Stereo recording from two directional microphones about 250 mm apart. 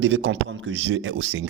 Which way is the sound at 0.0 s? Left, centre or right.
Right.